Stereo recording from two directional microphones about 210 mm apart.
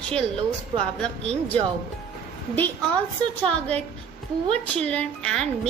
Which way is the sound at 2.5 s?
10° left (ahead or behind).